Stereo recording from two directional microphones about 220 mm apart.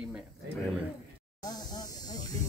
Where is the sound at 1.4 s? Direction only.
20° left (ahead or behind).